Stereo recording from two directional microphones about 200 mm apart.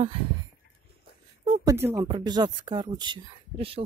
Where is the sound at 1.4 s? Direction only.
20° right (ahead or behind).